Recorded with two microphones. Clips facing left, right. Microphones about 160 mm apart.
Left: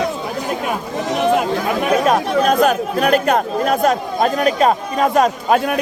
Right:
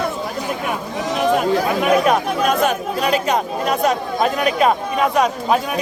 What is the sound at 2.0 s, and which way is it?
Chatter, 40° left (ahead or behind).